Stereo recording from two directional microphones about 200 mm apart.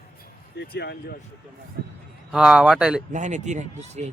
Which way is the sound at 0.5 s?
55° left (ahead or behind).